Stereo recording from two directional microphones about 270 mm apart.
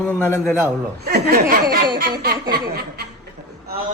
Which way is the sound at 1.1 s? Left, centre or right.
Right.